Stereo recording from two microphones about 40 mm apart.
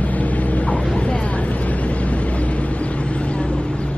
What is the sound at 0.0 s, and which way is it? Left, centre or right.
Vehicle, left.